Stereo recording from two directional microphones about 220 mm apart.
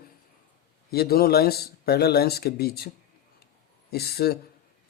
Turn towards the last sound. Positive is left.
turn(degrees=45)  # may be behind; listen again after turning